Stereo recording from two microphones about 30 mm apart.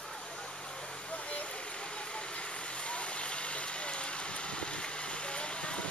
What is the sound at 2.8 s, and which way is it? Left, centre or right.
Vehicle, left.